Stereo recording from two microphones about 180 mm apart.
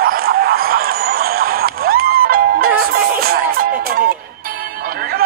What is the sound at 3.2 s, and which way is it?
Music, 55° right (ahead or behind).